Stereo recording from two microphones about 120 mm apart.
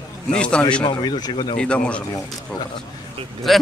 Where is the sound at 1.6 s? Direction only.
10° left (ahead or behind).